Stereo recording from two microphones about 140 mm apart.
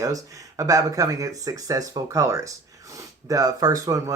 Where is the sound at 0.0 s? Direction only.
25° right (ahead or behind).